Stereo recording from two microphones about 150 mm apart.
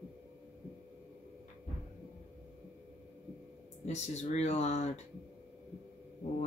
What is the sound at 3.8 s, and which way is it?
Speech, 45° left (ahead or behind).